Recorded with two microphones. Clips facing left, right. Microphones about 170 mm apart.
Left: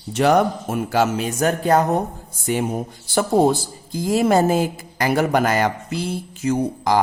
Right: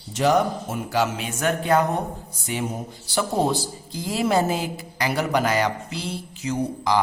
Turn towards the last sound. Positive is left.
turn(degrees=50)  # may be behind; listen again after turning